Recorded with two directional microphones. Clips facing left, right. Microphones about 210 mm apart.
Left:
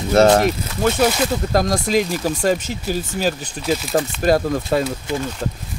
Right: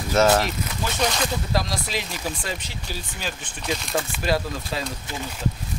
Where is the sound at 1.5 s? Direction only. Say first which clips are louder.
Left 9 dB; 50° left (ahead or behind).